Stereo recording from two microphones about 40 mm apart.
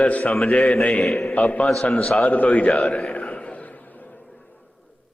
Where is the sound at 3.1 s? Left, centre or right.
Left.